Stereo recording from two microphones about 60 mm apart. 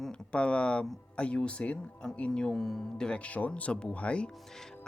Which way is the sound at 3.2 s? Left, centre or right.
Left.